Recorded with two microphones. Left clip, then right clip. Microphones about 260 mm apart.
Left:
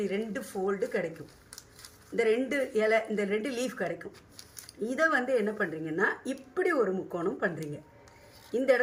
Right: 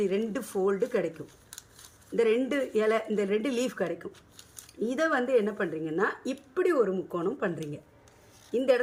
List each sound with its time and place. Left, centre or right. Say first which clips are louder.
0.0 s speech: right 4 dB; centre
2.1 s speech: right 2 dB; centre